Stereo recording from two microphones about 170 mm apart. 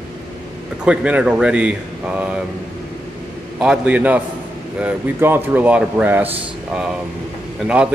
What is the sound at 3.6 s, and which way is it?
Speech, 5° right (ahead or behind).